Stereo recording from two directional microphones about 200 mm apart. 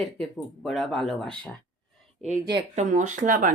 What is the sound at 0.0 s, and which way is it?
Speech, centre (ahead or behind).